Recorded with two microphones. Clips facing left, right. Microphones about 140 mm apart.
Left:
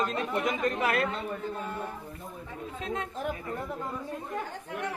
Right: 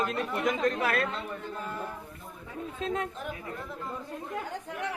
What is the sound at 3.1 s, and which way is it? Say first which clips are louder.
Speech: left 4 dB; 40° left (ahead or behind).